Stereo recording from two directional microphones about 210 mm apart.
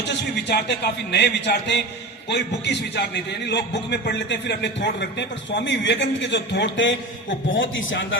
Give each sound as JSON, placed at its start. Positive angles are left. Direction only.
{"t": 0.1, "sound": "a man's voice", "side_deg": 55}